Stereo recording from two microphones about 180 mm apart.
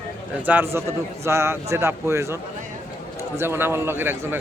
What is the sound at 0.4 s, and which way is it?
A man's voice, 10° right (ahead or behind).